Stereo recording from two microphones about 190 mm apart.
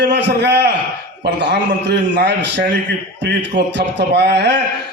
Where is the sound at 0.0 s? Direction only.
65° right (ahead or behind).